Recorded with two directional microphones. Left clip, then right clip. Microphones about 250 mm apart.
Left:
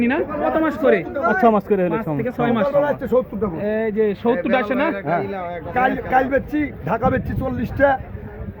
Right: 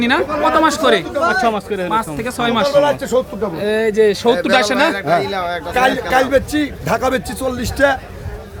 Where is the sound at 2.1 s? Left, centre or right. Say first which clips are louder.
Right 3 dB; centre.